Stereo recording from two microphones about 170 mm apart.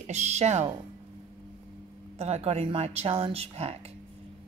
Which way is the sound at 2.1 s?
40° right (ahead or behind).